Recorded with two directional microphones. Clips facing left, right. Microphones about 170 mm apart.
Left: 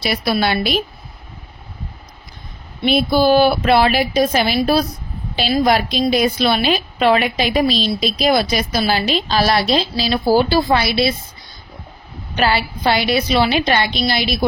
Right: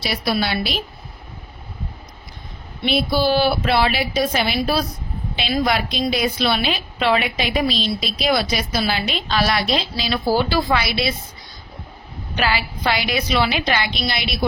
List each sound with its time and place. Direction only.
0.0 s a woman's voice: 55° left (ahead or behind)
2.8 s a woman's voice: 50° left (ahead or behind); by 11.1 s 35° left (ahead or behind)
12.4 s a woman's voice: 30° left (ahead or behind)